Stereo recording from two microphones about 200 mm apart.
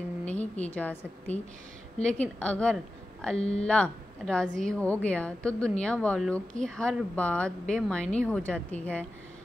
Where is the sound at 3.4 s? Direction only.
30° left (ahead or behind).